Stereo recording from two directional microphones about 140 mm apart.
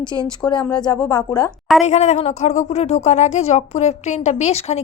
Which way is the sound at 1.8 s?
55° left (ahead or behind).